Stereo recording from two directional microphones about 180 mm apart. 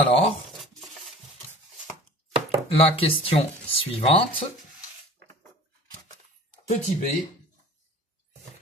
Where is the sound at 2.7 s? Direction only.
30° left (ahead or behind).